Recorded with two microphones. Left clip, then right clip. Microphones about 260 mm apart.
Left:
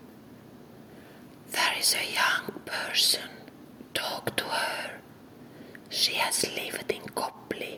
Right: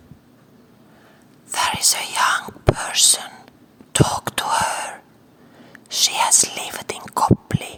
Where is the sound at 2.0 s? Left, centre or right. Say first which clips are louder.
Right 7 dB; right.